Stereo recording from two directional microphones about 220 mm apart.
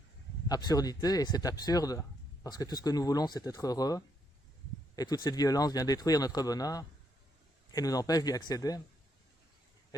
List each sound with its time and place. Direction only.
0.4 s speech: 15° left (ahead or behind)